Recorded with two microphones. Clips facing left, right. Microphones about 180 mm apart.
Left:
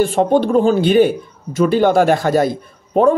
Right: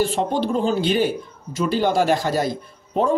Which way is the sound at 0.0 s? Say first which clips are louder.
Left 7 dB; 55° left (ahead or behind).